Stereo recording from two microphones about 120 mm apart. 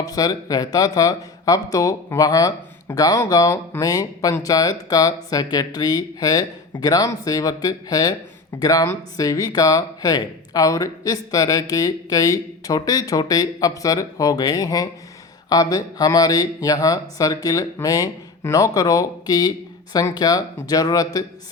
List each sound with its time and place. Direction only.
0.0 s speech: 30° left (ahead or behind)